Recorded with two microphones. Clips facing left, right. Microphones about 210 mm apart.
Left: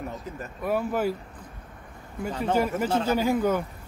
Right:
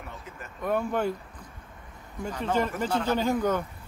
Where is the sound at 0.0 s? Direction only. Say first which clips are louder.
Left 7 dB; 40° left (ahead or behind).